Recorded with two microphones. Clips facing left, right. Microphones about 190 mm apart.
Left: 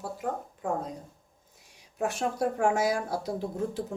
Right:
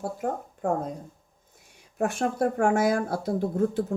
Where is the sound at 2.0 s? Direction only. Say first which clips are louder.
Right 4 dB; 55° right (ahead or behind).